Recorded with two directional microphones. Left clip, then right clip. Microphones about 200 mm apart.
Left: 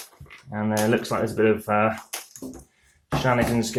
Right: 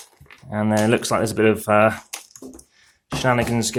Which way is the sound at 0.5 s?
45° right (ahead or behind).